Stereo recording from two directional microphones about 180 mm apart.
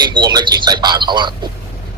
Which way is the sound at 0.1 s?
25° right (ahead or behind).